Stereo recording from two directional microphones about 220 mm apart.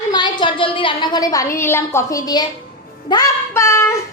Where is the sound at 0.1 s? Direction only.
20° left (ahead or behind).